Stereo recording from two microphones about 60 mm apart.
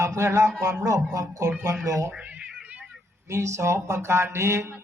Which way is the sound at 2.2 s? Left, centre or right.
Centre.